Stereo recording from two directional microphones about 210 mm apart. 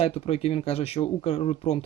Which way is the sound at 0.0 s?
30° left (ahead or behind).